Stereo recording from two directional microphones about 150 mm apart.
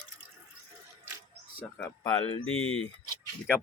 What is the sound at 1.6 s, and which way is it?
Speech, 10° left (ahead or behind).